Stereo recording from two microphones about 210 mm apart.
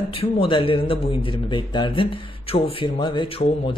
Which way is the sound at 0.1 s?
25° left (ahead or behind).